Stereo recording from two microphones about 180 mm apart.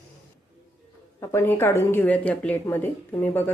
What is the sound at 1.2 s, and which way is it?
Speech, 15° left (ahead or behind).